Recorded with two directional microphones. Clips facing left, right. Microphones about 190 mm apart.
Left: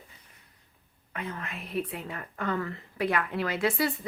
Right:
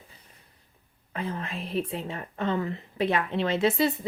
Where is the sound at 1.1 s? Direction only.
30° right (ahead or behind).